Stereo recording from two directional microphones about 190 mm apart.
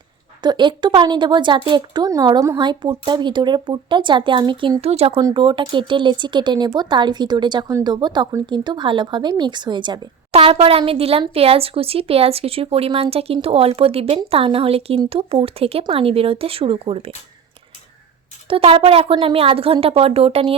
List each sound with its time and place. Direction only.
0.4 s speech: 25° right (ahead or behind)
18.4 s a woman's voice: 30° right (ahead or behind)